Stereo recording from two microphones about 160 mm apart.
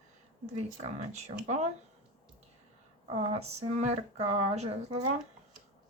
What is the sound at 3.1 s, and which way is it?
Speech, 40° right (ahead or behind).